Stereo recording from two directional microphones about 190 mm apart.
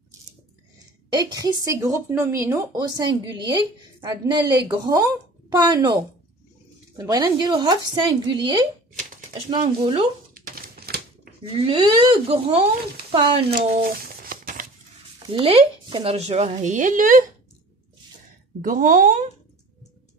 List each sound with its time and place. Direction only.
1.1 s speech: 20° right (ahead or behind)
7.0 s speech: 20° right (ahead or behind)
10.3 s a sound: 50° right (ahead or behind)
11.5 s speech: 30° right (ahead or behind)
13.8 s a sound: 50° right (ahead or behind)
15.2 s speech: 30° right (ahead or behind); by 17.2 s 45° right (ahead or behind)
18.6 s speech: 45° right (ahead or behind)